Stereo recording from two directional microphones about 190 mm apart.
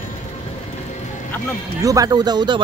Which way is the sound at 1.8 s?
20° right (ahead or behind).